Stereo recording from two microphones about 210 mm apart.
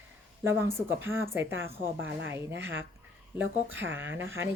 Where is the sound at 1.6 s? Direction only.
60° right (ahead or behind).